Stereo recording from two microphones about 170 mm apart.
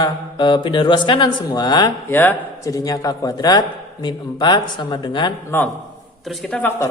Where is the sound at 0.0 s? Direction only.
25° left (ahead or behind).